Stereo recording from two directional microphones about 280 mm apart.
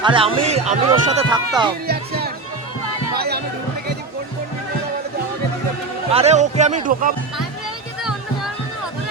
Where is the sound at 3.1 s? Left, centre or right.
Right.